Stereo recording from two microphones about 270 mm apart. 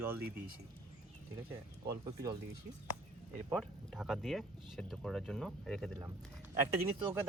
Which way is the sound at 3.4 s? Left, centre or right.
Centre.